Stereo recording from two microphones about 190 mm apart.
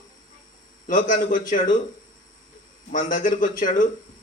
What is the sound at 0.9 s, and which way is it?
Speech, 45° left (ahead or behind).